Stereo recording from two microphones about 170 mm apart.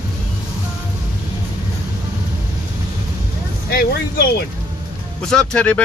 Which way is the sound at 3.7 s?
65° left (ahead or behind).